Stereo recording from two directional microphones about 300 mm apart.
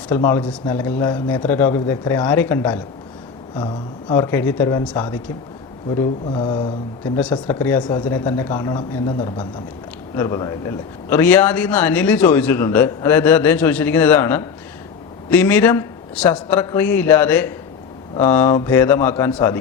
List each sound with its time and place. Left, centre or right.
0.1 s a man's voice: centre